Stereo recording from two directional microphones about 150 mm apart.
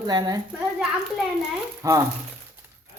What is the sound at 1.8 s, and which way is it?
Speech, 20° right (ahead or behind).